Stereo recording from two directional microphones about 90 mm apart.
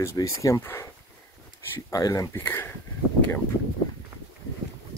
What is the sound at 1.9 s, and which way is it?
Speech, 40° left (ahead or behind).